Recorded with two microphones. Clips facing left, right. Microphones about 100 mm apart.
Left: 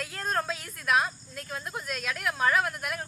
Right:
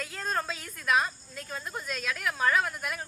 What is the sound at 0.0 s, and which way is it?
A woman's voice, centre (ahead or behind).